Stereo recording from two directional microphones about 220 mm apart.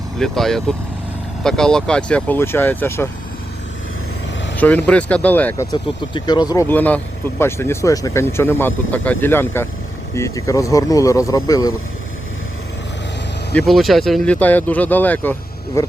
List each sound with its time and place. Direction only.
0.2 s speech: centre (ahead or behind)
4.5 s speech: 5° left (ahead or behind)
5.7 s speech: 20° left (ahead or behind)
13.5 s speech: 5° left (ahead or behind)